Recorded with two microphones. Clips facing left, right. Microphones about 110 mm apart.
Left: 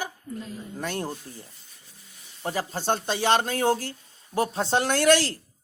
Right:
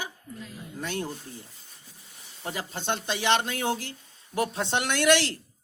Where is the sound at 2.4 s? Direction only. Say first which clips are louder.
Left 5 dB; 40° left (ahead or behind).